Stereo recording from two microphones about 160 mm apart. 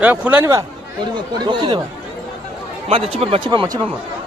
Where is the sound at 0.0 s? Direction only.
10° right (ahead or behind).